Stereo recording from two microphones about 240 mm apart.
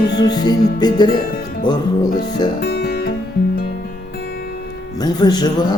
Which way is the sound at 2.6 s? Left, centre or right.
Left.